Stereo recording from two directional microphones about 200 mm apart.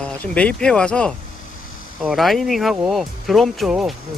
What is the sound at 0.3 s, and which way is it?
Speech, 5° left (ahead or behind).